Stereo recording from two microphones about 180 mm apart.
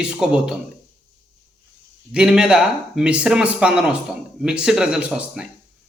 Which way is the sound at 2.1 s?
5° right (ahead or behind).